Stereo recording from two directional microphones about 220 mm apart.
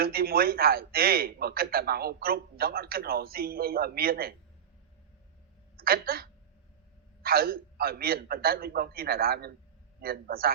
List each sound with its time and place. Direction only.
0.0 s a man's voice: 45° right (ahead or behind)
5.7 s a man's voice: 45° right (ahead or behind)